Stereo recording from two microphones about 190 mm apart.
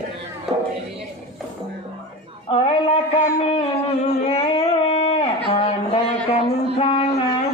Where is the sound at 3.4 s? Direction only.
30° left (ahead or behind).